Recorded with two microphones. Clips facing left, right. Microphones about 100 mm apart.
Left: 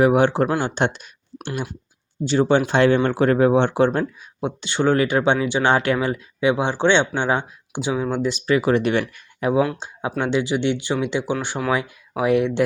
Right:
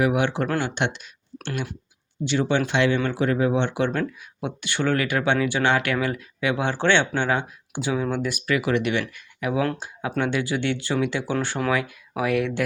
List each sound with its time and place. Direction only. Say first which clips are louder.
0.0 s speech: left 6 dB; 35° left (ahead or behind)
2.2 s speech: left 5 dB; 35° left (ahead or behind)
4.4 s speech: left 4 dB; 25° left (ahead or behind)
9.6 s speech: left 4 dB; 5° left (ahead or behind)
10.2 s speech: left 3 dB; 20° left (ahead or behind)